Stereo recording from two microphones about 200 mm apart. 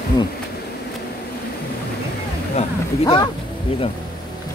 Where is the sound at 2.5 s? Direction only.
30° left (ahead or behind).